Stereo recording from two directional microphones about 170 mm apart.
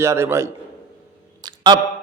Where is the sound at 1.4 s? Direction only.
25° right (ahead or behind).